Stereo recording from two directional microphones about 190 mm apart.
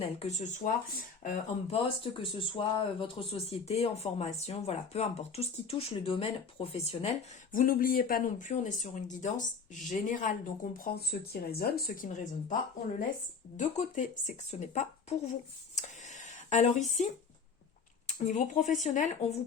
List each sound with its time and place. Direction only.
0.0 s speech: 35° left (ahead or behind)
2.1 s speech: 25° left (ahead or behind)
7.5 s speech: 45° left (ahead or behind)
10.9 s speech: 55° left (ahead or behind); by 12.5 s 40° left (ahead or behind)
13.6 s speech: 40° left (ahead or behind)
18.1 s speech: 40° left (ahead or behind)